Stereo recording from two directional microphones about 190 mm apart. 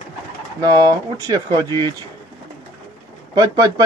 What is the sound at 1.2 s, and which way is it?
Speech, 20° right (ahead or behind).